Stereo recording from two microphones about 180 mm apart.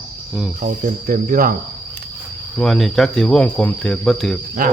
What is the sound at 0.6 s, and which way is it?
Speech, 50° right (ahead or behind).